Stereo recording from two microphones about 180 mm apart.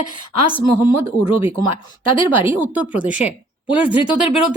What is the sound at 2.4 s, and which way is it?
Speech, 10° right (ahead or behind).